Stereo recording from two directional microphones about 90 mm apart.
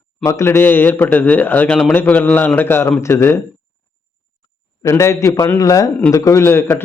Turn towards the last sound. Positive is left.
turn(degrees=25)  # may be behind; listen again after turning